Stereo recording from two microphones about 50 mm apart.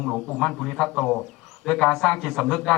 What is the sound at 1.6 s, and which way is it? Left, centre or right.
A man's voice, centre.